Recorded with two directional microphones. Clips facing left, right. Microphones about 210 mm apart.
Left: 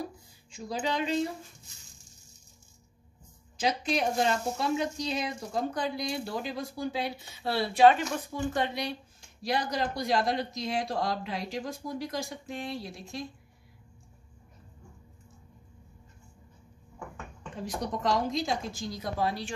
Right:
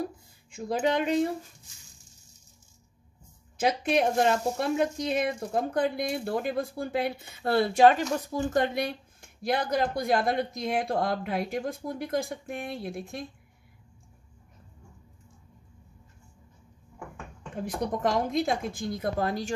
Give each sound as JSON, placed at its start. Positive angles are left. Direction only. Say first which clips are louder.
{"t": 0.0, "sound": "a sound", "louder": "right 4 dB", "side_deg": -55}
{"t": 3.5, "sound": "speech", "louder": "right 4 dB", "side_deg": -55}
{"t": 17.6, "sound": "speech", "louder": "right 4 dB", "side_deg": -55}